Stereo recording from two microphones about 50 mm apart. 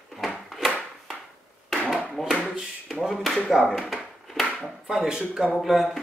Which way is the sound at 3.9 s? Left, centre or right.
Centre.